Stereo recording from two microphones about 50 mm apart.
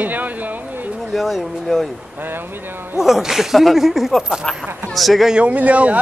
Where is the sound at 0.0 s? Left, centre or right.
Right.